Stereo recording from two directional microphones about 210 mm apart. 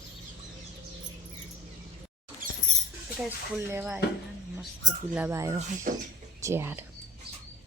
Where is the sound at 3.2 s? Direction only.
10° right (ahead or behind).